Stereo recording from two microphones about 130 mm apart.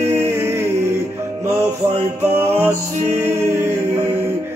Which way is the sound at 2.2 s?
20° right (ahead or behind).